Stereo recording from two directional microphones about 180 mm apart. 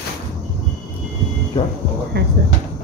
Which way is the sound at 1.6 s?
30° left (ahead or behind).